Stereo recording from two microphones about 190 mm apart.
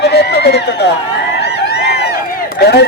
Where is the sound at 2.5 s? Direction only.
60° left (ahead or behind).